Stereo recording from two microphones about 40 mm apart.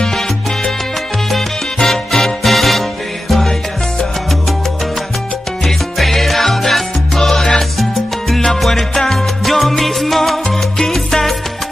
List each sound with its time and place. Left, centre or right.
1.3 s music: centre
3.3 s salsa music: centre
5.7 s music: centre
7.5 s salsa music: centre